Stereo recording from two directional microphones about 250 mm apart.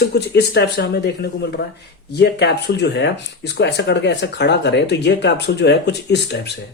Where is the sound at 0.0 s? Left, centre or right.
Left.